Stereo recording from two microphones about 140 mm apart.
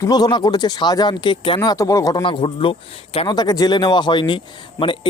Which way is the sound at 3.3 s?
30° left (ahead or behind).